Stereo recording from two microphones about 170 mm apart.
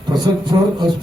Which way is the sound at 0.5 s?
25° right (ahead or behind).